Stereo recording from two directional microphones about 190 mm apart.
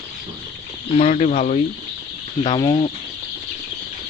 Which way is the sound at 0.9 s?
35° left (ahead or behind).